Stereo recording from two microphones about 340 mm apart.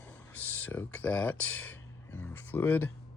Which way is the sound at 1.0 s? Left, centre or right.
Centre.